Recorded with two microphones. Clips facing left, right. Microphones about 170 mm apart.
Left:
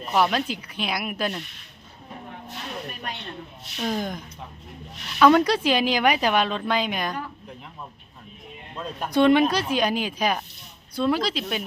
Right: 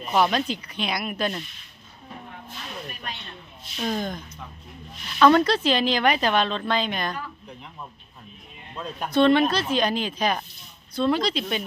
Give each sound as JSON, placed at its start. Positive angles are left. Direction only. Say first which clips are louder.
{"t": 0.0, "sound": "speech", "louder": "even", "side_deg": 0}
{"t": 3.8, "sound": "a woman's voice", "louder": "even", "side_deg": 10}
{"t": 5.2, "sound": "a woman's voice", "louder": "even", "side_deg": 10}
{"t": 8.7, "sound": "speech", "louder": "even", "side_deg": 0}
{"t": 9.0, "sound": "a woman's voice", "louder": "left 1 dB", "side_deg": 15}